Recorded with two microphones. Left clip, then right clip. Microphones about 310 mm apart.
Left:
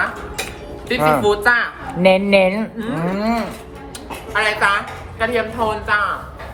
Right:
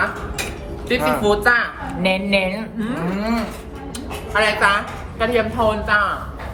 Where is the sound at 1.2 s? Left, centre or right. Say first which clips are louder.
Left 1 dB; centre.